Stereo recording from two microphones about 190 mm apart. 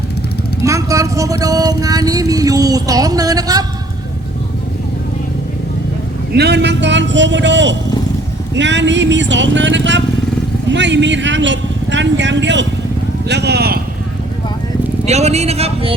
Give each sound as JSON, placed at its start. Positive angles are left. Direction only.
{"t": 0.6, "sound": "speech", "side_deg": -15}
{"t": 6.3, "sound": "speech", "side_deg": -60}
{"t": 15.0, "sound": "speech", "side_deg": -35}